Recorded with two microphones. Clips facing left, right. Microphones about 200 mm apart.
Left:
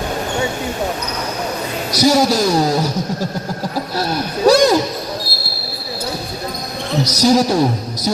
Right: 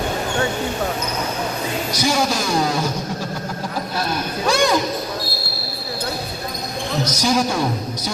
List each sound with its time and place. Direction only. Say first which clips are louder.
1.9 s a man's voice: left 8 dB; 40° left (ahead or behind)
3.9 s speech: left 3 dB; 40° left (ahead or behind)
7.0 s a man's voice: left 6 dB; 40° left (ahead or behind)